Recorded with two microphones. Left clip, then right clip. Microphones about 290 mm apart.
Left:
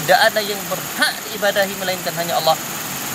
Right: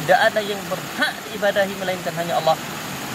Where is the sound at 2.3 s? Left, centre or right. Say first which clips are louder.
Left 2 dB; centre.